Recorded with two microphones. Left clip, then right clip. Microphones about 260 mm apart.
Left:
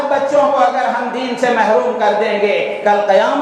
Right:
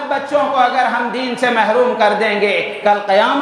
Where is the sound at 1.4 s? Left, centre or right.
Right.